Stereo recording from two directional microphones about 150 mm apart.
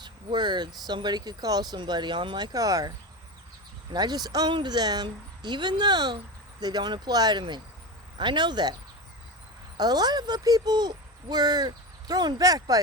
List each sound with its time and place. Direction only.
0.0 s speech: 30° right (ahead or behind)
3.9 s speech: 25° right (ahead or behind)
9.7 s speech: 25° right (ahead or behind)